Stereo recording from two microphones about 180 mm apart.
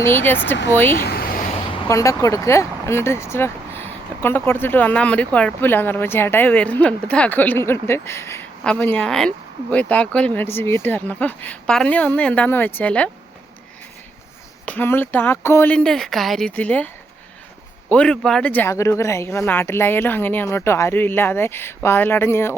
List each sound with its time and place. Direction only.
0.0 s speech: 15° left (ahead or behind)
0.9 s a sound: 60° left (ahead or behind)
1.9 s speech: 15° left (ahead or behind)
14.6 s speech: 10° left (ahead or behind)
17.9 s speech: 5° left (ahead or behind)